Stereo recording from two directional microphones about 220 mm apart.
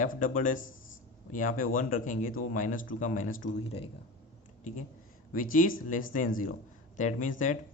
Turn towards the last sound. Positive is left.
turn(degrees=35)  # may be behind; listen again after turning